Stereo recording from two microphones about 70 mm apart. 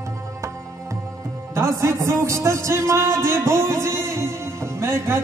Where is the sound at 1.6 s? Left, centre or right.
Right.